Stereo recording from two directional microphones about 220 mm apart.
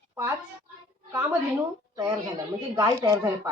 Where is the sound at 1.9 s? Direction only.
15° right (ahead or behind).